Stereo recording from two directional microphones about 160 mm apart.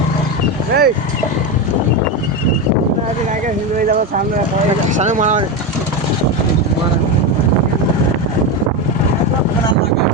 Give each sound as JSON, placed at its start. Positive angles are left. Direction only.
{"t": 0.7, "sound": "speech", "side_deg": -75}
{"t": 3.8, "sound": "speech", "side_deg": -60}
{"t": 5.0, "sound": "speech", "side_deg": -50}